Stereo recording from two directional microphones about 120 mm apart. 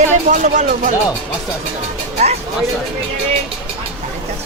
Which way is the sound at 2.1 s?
65° right (ahead or behind).